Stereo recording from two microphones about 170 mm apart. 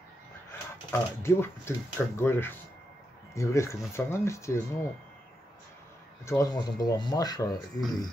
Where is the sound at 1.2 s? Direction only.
15° left (ahead or behind).